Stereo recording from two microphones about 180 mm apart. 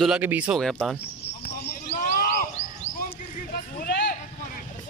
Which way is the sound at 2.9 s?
55° left (ahead or behind).